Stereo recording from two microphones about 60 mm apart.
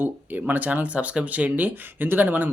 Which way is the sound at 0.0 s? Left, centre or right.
Right.